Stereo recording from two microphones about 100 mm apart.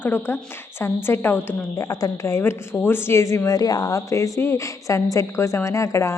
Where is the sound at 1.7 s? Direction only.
35° left (ahead or behind).